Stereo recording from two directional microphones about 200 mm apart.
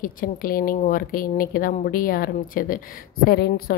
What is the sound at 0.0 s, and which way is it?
A woman's voice, 45° left (ahead or behind).